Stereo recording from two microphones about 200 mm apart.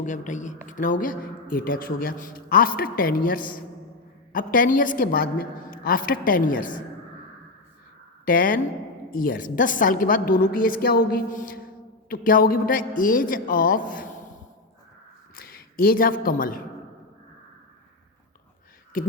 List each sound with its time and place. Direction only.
0.0 s speech: 40° left (ahead or behind)
8.2 s speech: 45° left (ahead or behind)
15.4 s speech: 45° left (ahead or behind)